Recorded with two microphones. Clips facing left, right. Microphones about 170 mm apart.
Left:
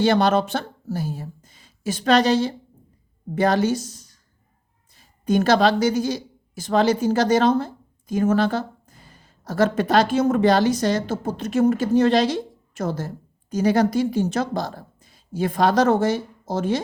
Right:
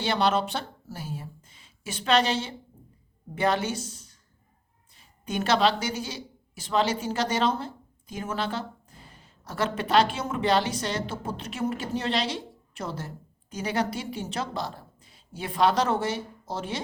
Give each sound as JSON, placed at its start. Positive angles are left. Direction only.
{"t": 0.0, "sound": "a woman's voice", "side_deg": 45}